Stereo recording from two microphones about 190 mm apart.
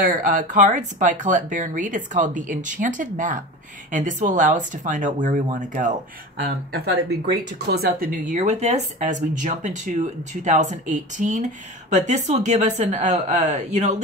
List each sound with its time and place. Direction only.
0.0 s speech: 45° right (ahead or behind)
6.4 s speech: 55° right (ahead or behind); by 14.0 s 35° right (ahead or behind)